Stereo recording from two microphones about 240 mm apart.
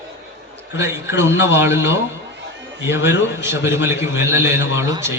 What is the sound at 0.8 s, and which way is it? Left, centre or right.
A man's voice, centre.